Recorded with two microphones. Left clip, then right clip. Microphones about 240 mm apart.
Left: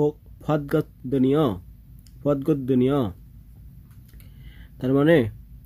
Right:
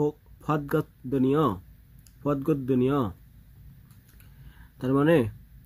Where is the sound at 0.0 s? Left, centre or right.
Centre.